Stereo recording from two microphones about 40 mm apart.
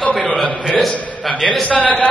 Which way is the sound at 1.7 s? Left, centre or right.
Left.